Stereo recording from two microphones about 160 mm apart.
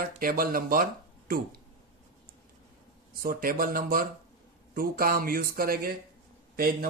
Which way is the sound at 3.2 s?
60° right (ahead or behind).